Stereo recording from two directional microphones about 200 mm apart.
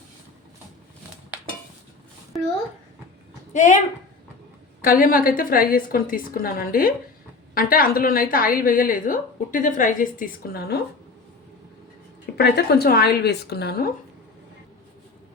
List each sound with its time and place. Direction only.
3.5 s a woman's voice: 35° left (ahead or behind)
4.8 s a woman's voice: 45° left (ahead or behind)
12.2 s a woman's voice: 50° left (ahead or behind)